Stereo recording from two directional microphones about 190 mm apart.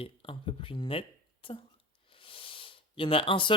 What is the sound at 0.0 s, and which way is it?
Speech, 30° left (ahead or behind).